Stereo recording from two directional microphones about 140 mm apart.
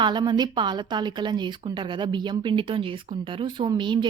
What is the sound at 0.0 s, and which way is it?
Speech, 30° right (ahead or behind).